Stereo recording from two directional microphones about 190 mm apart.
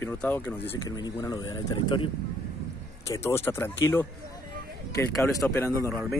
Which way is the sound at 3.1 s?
15° left (ahead or behind).